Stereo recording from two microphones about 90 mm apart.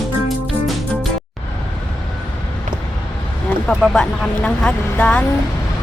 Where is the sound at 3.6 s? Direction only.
10° left (ahead or behind).